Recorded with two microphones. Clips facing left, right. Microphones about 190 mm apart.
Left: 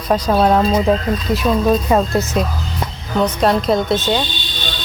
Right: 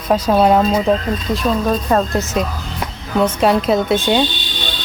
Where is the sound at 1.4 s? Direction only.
10° left (ahead or behind); by 4.2 s 10° right (ahead or behind).